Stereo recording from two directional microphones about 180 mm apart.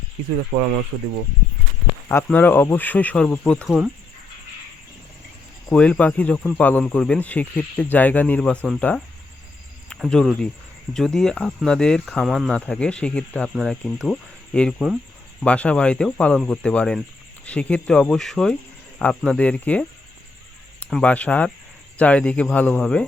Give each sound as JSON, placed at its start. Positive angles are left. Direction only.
{"t": 0.5, "sound": "speech", "side_deg": -25}
{"t": 2.0, "sound": "speech", "side_deg": 10}
{"t": 5.7, "sound": "speech", "side_deg": 5}
{"t": 9.9, "sound": "speech", "side_deg": 5}